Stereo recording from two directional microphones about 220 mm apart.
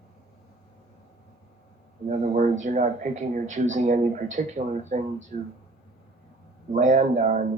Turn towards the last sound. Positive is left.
turn(degrees=-35)  # may be behind; listen again after turning